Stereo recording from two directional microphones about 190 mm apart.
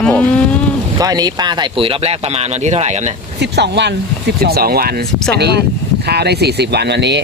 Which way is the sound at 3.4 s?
65° right (ahead or behind).